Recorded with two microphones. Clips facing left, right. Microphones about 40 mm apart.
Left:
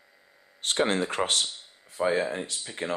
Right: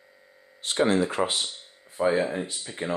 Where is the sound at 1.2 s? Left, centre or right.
Centre.